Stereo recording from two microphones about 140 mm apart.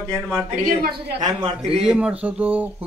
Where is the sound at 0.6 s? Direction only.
90° right.